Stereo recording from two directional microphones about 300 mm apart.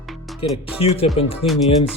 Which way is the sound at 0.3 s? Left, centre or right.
Centre.